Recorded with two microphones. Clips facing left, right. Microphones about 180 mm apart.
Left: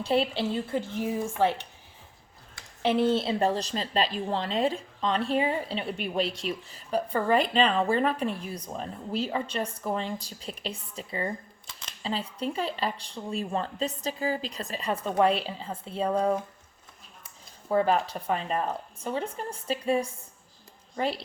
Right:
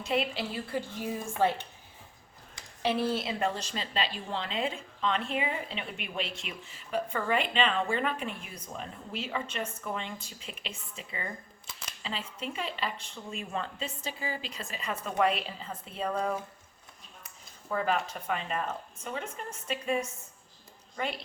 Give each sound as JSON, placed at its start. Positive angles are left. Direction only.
{"t": 0.0, "sound": "a woman's voice", "side_deg": 30}
{"t": 2.8, "sound": "a woman's voice", "side_deg": 20}